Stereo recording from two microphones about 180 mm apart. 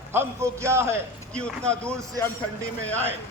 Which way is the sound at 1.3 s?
5° left (ahead or behind).